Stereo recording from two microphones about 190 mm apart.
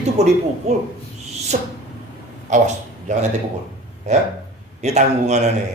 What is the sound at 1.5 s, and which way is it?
Speech, 35° right (ahead or behind).